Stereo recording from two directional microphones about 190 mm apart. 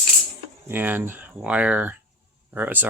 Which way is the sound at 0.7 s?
10° right (ahead or behind).